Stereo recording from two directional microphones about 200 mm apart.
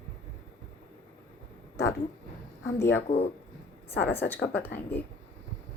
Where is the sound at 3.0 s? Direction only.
35° left (ahead or behind).